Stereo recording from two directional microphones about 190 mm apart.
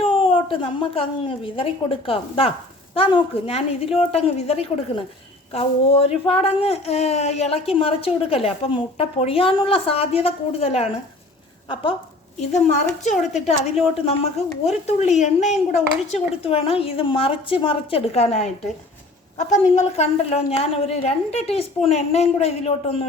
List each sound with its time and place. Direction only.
0.0 s a woman's voice: 30° left (ahead or behind)
12.4 s a woman's voice: 35° left (ahead or behind)